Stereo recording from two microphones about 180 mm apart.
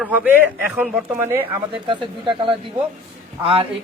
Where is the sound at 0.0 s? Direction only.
10° right (ahead or behind).